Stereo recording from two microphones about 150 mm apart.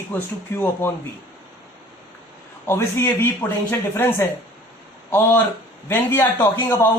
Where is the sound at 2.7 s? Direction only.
15° left (ahead or behind).